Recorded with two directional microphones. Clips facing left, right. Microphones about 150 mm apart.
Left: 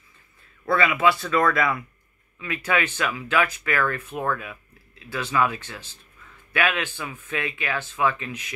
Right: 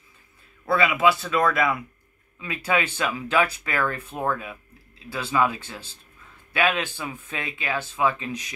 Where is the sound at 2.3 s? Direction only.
25° right (ahead or behind).